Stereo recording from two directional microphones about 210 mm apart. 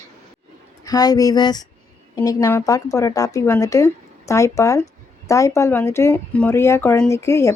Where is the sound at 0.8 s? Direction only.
20° left (ahead or behind).